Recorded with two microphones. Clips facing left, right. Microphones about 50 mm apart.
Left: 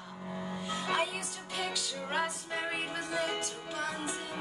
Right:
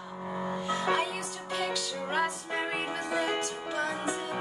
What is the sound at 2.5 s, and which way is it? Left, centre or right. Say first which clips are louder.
Music: right 3 dB; centre.